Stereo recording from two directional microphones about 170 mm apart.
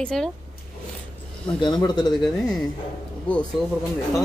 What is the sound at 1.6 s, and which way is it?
Speech, 25° left (ahead or behind).